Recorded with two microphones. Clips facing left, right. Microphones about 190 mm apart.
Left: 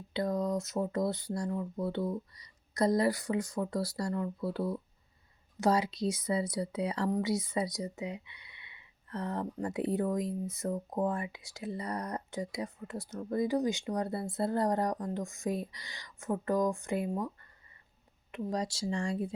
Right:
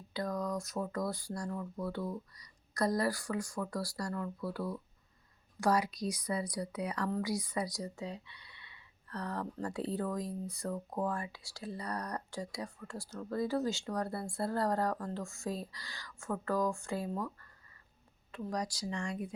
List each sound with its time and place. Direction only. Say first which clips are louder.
0.1 s speech: left 5 dB; 25° left (ahead or behind)